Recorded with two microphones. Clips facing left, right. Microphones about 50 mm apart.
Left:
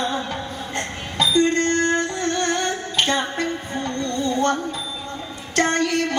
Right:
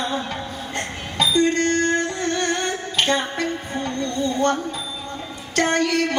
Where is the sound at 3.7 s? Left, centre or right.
Centre.